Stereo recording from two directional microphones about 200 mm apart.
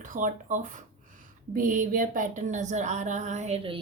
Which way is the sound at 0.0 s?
40° right (ahead or behind).